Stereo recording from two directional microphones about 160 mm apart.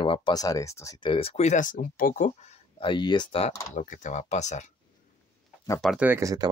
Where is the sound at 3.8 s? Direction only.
50° left (ahead or behind).